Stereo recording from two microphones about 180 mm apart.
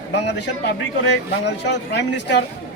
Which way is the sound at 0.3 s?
75° left (ahead or behind).